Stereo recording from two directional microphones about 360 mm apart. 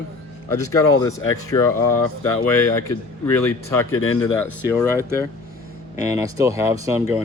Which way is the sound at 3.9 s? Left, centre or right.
Left.